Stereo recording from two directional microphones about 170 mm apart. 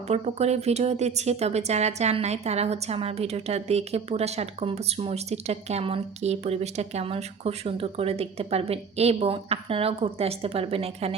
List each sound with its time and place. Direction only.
0.1 s speech: 40° right (ahead or behind)